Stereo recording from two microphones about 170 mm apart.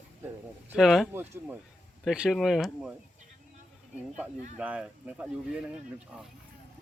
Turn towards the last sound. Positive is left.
turn(degrees=-5)  # may be behind; listen again after turning